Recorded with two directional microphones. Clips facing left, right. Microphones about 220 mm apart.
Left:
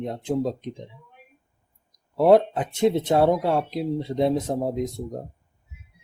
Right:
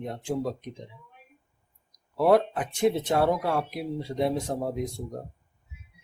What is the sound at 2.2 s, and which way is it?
Speech, 25° left (ahead or behind).